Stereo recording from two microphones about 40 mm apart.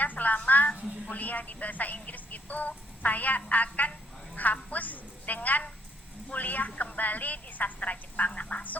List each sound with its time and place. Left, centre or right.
0.0 s a woman's voice: left